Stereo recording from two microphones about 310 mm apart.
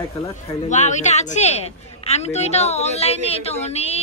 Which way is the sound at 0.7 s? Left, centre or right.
Left.